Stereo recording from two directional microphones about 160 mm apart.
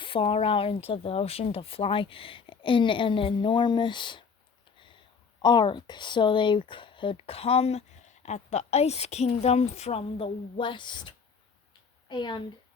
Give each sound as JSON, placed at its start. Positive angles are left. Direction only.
{"t": 0.0, "sound": "speech", "side_deg": 35}
{"t": 5.4, "sound": "speech", "side_deg": 30}